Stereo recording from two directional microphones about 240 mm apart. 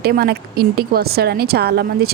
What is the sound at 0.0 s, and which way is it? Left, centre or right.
A woman's voice, right.